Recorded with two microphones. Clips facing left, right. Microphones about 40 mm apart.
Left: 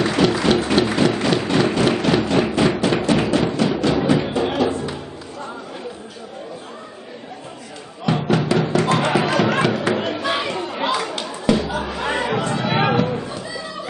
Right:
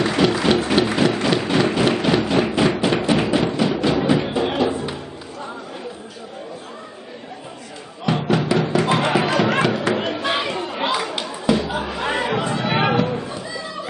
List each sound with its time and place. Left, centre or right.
0.0 s applause: centre
8.0 s music: centre
8.7 s a sound: centre